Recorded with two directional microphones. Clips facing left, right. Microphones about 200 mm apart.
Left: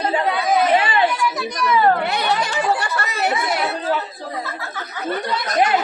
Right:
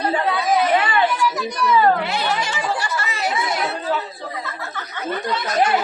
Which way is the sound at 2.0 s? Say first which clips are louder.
Left 2 dB; 60° left (ahead or behind).